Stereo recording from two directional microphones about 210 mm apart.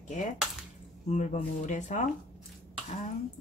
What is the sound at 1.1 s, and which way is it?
Speech, 35° left (ahead or behind).